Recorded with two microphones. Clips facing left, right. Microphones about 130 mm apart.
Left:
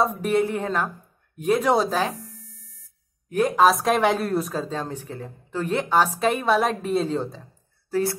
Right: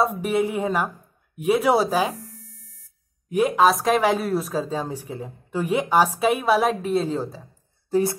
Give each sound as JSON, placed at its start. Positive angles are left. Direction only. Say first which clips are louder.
{"t": 0.0, "sound": "a woman's voice", "louder": "even", "side_deg": 0}
{"t": 3.3, "sound": "speech", "louder": "even", "side_deg": -10}
{"t": 7.9, "sound": "speech", "louder": "right 3 dB", "side_deg": -20}